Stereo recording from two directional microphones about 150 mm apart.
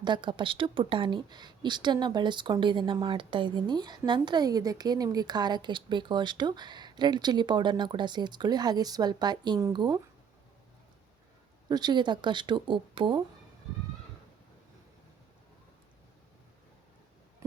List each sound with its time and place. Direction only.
0.0 s a woman's voice: 30° right (ahead or behind)
11.7 s speech: 30° right (ahead or behind)